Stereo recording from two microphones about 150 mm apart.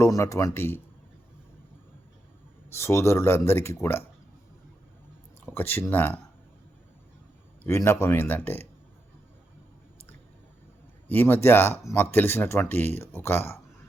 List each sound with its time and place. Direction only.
0.0 s speech: 20° left (ahead or behind)
2.7 s speech: 15° left (ahead or behind)
5.5 s speech: 15° left (ahead or behind)
7.6 s speech: 15° left (ahead or behind)
11.1 s speech: 15° left (ahead or behind)